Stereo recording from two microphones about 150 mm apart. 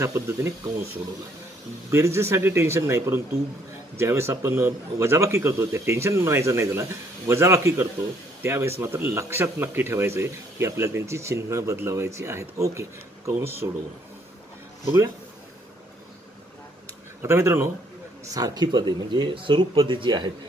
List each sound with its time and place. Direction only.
0.0 s speech: 20° right (ahead or behind)
1.9 s speech: 20° right (ahead or behind)
17.2 s speech: 15° right (ahead or behind)